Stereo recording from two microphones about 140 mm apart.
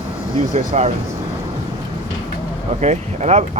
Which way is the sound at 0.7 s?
50° right (ahead or behind).